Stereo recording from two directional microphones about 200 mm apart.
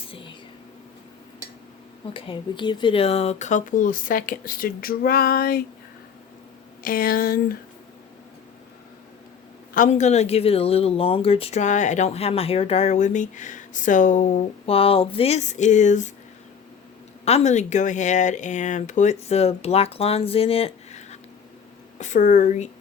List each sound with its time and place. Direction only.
2.1 s speech: 25° left (ahead or behind); by 5.6 s 50° left (ahead or behind)
6.8 s speech: 45° left (ahead or behind)
9.7 s speech: 35° left (ahead or behind)
17.2 s speech: 35° left (ahead or behind)